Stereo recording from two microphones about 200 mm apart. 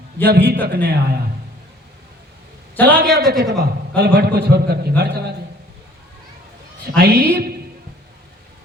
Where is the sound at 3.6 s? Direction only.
55° right (ahead or behind).